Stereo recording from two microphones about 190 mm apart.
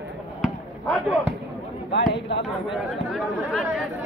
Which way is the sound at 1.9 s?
70° left (ahead or behind).